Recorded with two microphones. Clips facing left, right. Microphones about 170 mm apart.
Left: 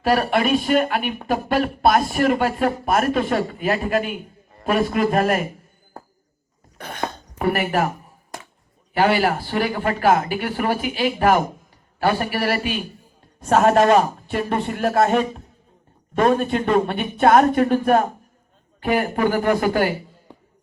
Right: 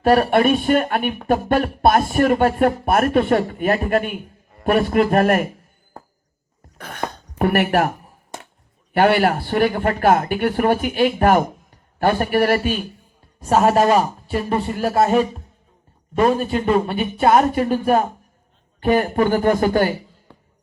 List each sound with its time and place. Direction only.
0.0 s speech: 45° right (ahead or behind)
7.3 s speech: 65° right (ahead or behind)
8.9 s speech: 55° right (ahead or behind)
13.4 s speech: 5° right (ahead or behind)
18.9 s speech: 35° right (ahead or behind)
20.3 s music: 15° left (ahead or behind)